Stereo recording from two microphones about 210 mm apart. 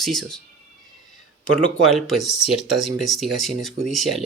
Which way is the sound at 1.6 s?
Centre (ahead or behind).